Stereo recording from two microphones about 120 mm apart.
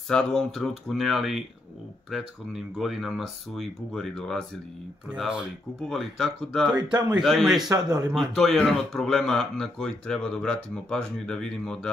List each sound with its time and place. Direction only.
0.1 s speech: 5° left (ahead or behind)
5.1 s speech: 5° right (ahead or behind)
6.8 s a man's voice: 35° right (ahead or behind)
7.1 s speech: 5° right (ahead or behind)
7.7 s a man's voice: 30° right (ahead or behind)
8.1 s speech: centre (ahead or behind)